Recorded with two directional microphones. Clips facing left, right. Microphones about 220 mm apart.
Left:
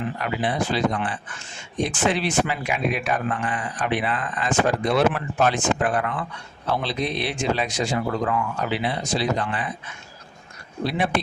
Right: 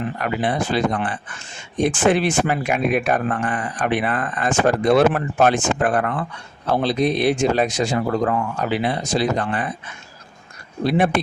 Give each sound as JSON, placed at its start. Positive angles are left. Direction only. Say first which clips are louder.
{"t": 0.2, "sound": "speech", "louder": "right 3 dB", "side_deg": -50}
{"t": 10.8, "sound": "speech", "louder": "right 6 dB", "side_deg": -50}